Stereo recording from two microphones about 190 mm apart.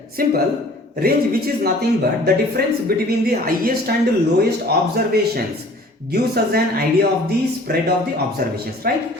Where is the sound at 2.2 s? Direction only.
55° right (ahead or behind).